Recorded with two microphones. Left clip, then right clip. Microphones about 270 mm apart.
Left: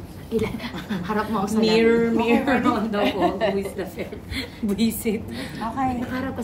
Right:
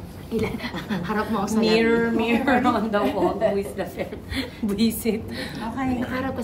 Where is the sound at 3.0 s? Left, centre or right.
Left.